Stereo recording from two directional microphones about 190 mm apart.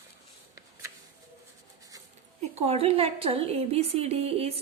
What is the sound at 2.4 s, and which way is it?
A woman's voice, 35° right (ahead or behind).